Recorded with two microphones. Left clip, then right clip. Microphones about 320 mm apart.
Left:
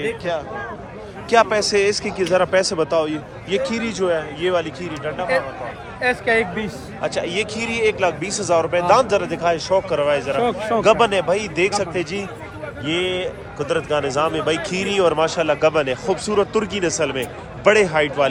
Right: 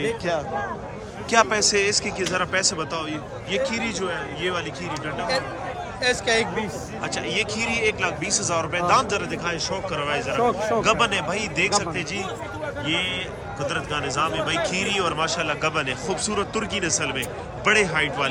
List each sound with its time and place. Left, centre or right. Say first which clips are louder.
0.0 s a man's voice: left 1 dB; centre
6.0 s speech: left 4 dB; centre
7.0 s a man's voice: left 4 dB; centre